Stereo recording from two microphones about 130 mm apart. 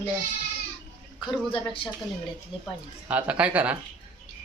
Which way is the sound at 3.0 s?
10° right (ahead or behind).